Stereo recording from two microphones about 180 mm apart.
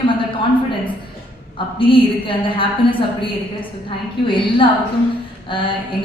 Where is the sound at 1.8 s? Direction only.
30° left (ahead or behind).